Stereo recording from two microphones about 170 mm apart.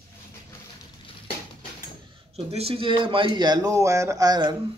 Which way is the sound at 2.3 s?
35° right (ahead or behind).